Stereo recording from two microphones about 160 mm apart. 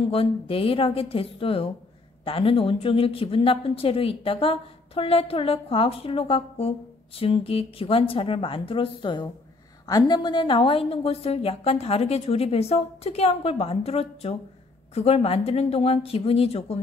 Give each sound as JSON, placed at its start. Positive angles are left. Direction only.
{"t": 0.1, "sound": "a woman's voice", "side_deg": 35}